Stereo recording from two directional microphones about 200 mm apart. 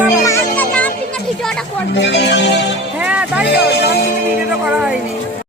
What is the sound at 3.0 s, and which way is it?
Music, 5° right (ahead or behind).